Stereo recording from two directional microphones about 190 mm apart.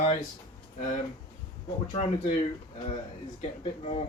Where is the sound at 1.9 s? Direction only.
35° left (ahead or behind).